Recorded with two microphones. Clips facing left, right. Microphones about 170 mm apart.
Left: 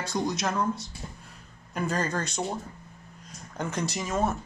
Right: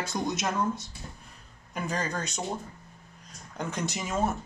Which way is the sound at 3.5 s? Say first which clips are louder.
Left 2 dB; centre (ahead or behind).